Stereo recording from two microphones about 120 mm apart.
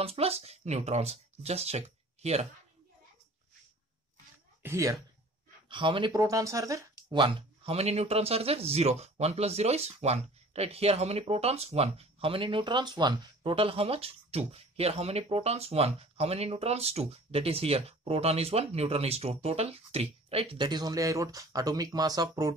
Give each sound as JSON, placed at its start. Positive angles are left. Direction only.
{"t": 0.0, "sound": "speech", "side_deg": -55}
{"t": 4.6, "sound": "speech", "side_deg": -25}
{"t": 5.7, "sound": "speech", "side_deg": -45}
{"t": 6.1, "sound": "speech", "side_deg": -25}
{"t": 7.1, "sound": "speech", "side_deg": -45}
{"t": 20.6, "sound": "speech", "side_deg": -35}